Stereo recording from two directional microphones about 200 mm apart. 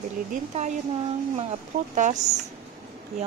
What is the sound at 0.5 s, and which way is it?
Speech, 35° right (ahead or behind).